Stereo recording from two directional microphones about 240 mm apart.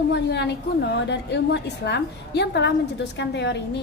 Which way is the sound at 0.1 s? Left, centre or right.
Left.